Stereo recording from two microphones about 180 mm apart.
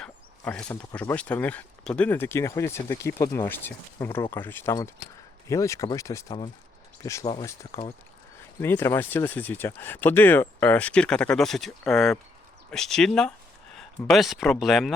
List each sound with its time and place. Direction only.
0.0 s speech: 5° left (ahead or behind)